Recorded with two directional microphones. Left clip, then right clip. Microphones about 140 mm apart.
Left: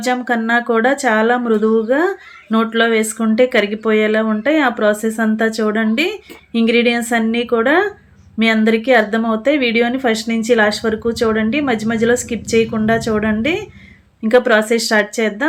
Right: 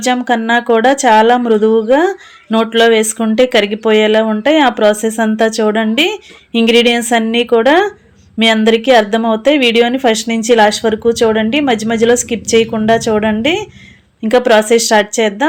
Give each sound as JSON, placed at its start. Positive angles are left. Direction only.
{"t": 0.0, "sound": "speech", "side_deg": -30}